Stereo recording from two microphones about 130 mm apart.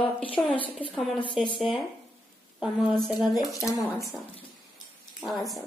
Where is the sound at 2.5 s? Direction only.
5° right (ahead or behind).